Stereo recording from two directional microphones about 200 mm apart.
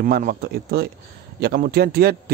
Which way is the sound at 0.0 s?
45° right (ahead or behind).